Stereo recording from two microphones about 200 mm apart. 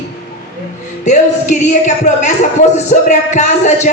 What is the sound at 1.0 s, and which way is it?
Speech, 35° left (ahead or behind).